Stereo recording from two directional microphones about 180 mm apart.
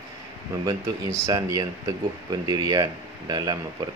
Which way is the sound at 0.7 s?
20° right (ahead or behind).